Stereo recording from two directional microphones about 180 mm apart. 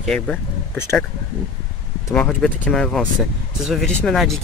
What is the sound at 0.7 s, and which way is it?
Speech, 15° left (ahead or behind).